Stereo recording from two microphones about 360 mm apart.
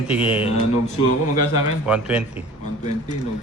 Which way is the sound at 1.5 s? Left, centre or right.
Centre.